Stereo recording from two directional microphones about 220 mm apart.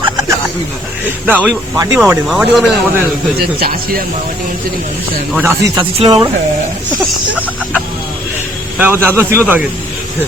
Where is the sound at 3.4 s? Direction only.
45° right (ahead or behind).